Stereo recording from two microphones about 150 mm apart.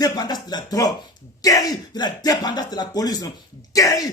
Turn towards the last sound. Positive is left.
turn(degrees=25)  # may be behind; listen again after turning